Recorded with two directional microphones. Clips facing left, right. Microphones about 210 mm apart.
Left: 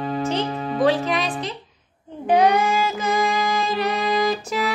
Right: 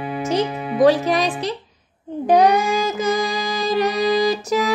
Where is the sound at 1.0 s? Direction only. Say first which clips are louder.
Right 4 dB; 40° right (ahead or behind).